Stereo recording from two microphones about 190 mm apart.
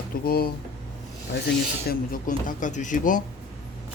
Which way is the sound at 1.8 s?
45° left (ahead or behind).